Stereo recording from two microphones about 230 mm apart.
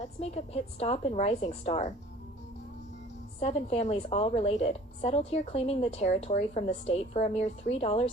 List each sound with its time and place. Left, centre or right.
0.0 s a woman's voice: left
3.4 s a woman's voice: left